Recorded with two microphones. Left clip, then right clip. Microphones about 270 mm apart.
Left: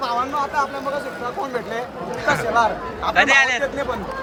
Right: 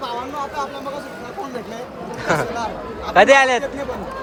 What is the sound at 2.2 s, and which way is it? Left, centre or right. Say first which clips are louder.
Speech: left 3 dB; centre.